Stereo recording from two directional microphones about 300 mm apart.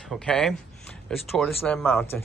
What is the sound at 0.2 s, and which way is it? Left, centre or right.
Speech, centre.